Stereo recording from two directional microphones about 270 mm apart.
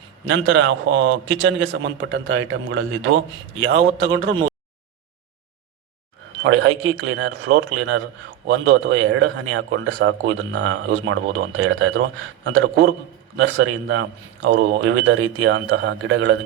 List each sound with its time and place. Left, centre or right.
0.3 s a man's voice: right
6.4 s a man's voice: right